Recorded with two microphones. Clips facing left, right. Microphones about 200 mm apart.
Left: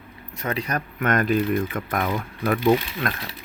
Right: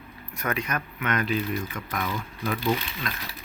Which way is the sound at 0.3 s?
30° left (ahead or behind).